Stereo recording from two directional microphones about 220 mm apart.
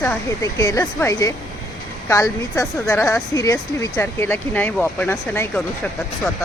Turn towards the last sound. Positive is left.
turn(degrees=5)  # may be behind; listen again after turning